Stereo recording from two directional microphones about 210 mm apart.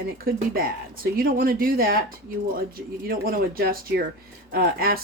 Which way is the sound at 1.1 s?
45° right (ahead or behind).